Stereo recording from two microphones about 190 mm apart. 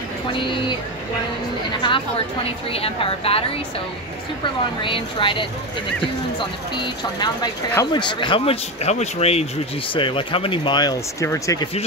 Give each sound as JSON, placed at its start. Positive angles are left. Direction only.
{"t": 0.3, "sound": "speech", "side_deg": 25}
{"t": 1.8, "sound": "a woman's voice", "side_deg": 25}
{"t": 4.8, "sound": "speech", "side_deg": 25}
{"t": 6.8, "sound": "speech", "side_deg": 20}